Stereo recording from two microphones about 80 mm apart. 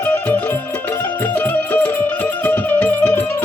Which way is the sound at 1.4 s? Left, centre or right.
Left.